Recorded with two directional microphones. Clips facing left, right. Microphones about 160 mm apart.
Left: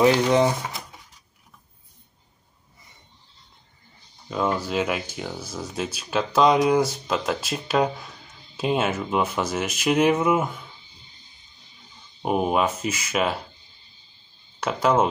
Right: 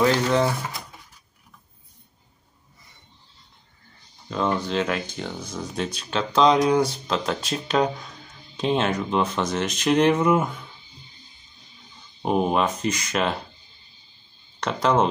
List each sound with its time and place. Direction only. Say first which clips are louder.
0.0 s speech: left 2 dB; 15° left (ahead or behind)
4.3 s speech: even; 5° left (ahead or behind)
12.2 s speech: even; 5° left (ahead or behind)
14.6 s speech: even; 5° left (ahead or behind)